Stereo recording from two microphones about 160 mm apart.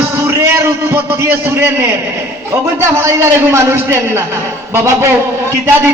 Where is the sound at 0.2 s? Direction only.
15° right (ahead or behind).